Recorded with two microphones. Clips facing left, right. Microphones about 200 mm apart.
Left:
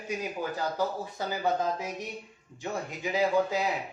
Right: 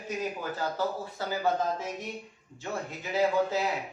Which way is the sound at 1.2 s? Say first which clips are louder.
Even; 15° left (ahead or behind).